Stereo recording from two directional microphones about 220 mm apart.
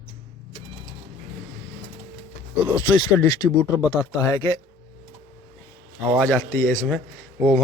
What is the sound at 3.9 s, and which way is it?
Speech, 15° left (ahead or behind).